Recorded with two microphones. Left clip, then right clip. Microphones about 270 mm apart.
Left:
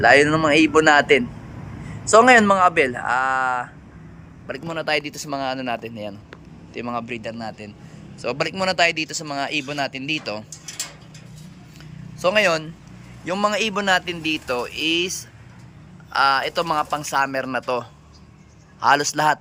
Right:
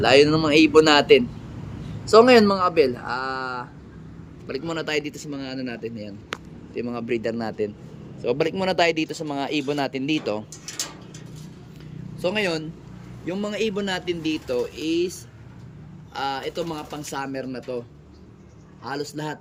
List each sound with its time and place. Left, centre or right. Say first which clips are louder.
0.0 s a man's voice: left 2 dB; centre
12.2 s a man's voice: left 6 dB; centre
16.1 s a man's voice: left 9 dB; centre
18.8 s a man's voice: left 14 dB; left
19.1 s a man's voice: left 13 dB; centre